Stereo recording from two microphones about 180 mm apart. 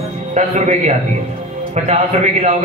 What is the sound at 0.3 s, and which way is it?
Speech, 40° right (ahead or behind).